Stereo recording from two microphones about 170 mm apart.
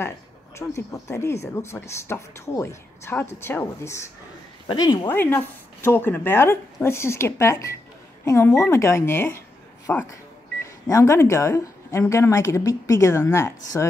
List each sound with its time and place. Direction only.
0.6 s speech: 20° left (ahead or behind)
4.6 s speech: 25° left (ahead or behind)
5.1 s speech: 10° left (ahead or behind)